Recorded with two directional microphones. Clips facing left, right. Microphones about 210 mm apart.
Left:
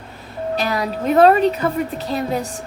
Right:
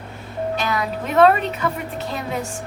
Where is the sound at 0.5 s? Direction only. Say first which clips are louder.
Left 4 dB; 35° left (ahead or behind).